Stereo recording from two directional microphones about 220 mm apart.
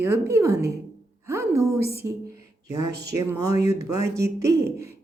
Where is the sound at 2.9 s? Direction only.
50° right (ahead or behind).